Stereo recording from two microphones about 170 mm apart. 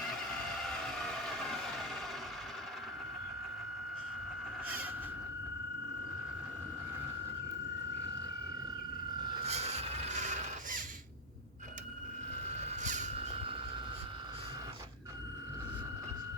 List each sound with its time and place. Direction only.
1.4 s vehicle: centre (ahead or behind)
4.6 s vehicle: 10° right (ahead or behind)
9.4 s a sound: 40° right (ahead or behind)
12.5 s vehicle: 45° right (ahead or behind)